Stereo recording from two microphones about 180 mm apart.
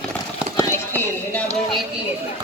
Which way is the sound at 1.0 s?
10° left (ahead or behind).